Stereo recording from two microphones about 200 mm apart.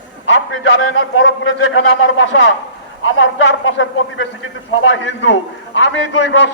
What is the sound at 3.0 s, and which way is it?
Speech, 75° left (ahead or behind).